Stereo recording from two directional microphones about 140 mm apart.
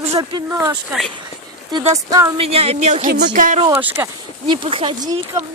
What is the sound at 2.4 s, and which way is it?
Speech, 45° right (ahead or behind).